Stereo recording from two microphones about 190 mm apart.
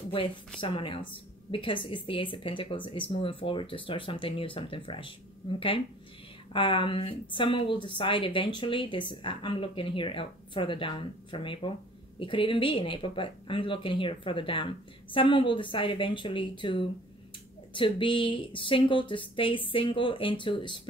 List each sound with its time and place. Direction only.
0.6 s a woman's voice: 25° left (ahead or behind)